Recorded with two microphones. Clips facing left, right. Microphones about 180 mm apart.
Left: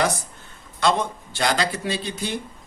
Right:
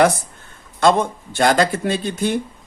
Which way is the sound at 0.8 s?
50° right (ahead or behind).